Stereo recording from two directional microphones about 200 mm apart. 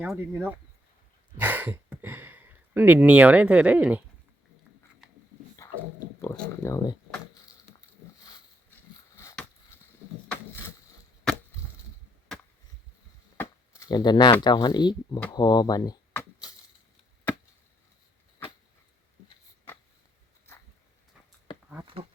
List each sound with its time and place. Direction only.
0.0 s speech: 10° right (ahead or behind)
5.6 s pig: 15° left (ahead or behind)
6.1 s a sound: 10° left (ahead or behind)
6.6 s speech: 15° left (ahead or behind)
13.3 s chop: 15° left (ahead or behind)
14.4 s speech: 20° left (ahead or behind)
20.5 s a sound: 10° left (ahead or behind)